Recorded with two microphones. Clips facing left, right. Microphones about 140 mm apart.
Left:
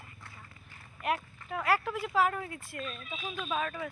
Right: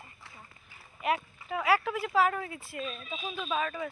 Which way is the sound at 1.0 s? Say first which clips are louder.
Right 2 dB; 5° right (ahead or behind).